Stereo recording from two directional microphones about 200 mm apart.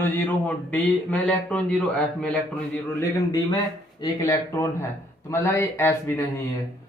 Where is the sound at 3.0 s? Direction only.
20° left (ahead or behind).